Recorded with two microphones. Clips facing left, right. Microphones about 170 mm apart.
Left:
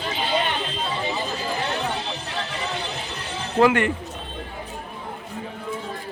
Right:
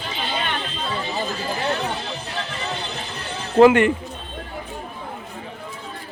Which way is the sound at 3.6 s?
20° right (ahead or behind).